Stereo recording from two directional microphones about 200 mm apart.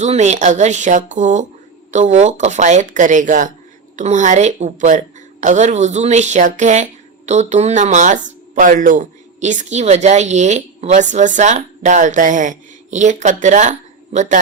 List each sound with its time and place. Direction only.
0.0 s speech: 35° right (ahead or behind)